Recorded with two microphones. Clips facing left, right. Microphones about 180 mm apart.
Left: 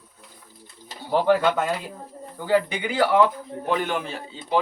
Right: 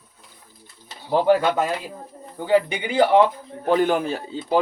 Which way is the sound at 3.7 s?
40° right (ahead or behind).